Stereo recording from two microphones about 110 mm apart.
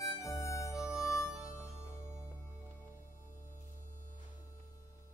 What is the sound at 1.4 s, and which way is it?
Music, 25° left (ahead or behind).